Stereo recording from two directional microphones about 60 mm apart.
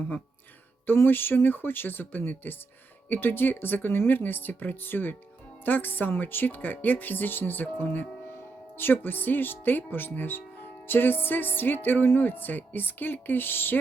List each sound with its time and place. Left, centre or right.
0.9 s speech: left